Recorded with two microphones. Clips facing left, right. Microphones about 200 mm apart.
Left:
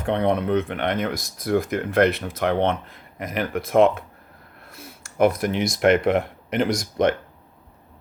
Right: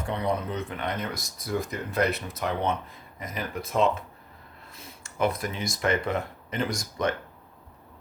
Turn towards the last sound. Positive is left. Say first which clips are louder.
# left 7 dB
turn(degrees=90)